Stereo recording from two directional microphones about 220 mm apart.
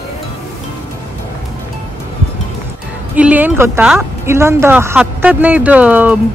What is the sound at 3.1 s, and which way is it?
Speech, 5° right (ahead or behind).